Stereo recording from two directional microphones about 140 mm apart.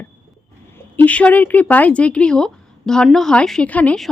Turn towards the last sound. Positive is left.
turn(degrees=10)  # may be behind; listen again after turning